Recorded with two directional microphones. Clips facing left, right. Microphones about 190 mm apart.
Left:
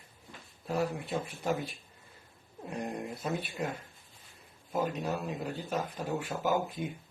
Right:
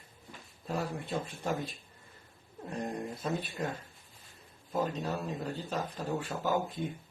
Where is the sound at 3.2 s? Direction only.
10° left (ahead or behind).